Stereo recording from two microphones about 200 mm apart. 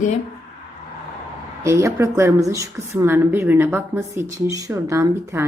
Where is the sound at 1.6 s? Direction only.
15° right (ahead or behind).